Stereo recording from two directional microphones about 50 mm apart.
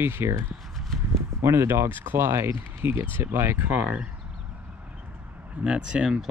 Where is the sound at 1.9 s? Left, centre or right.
Right.